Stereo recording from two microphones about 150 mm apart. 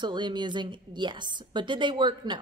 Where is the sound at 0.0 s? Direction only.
30° right (ahead or behind).